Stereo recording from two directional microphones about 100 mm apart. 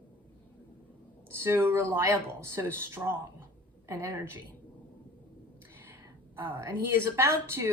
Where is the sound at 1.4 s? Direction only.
25° right (ahead or behind).